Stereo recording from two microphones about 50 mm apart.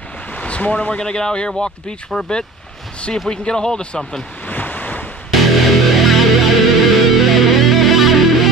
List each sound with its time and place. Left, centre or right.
0.3 s speech: left
4.5 s waves: left
5.3 s music: centre